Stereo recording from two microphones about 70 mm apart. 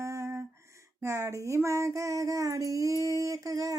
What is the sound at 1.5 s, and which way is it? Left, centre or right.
Female singing, right.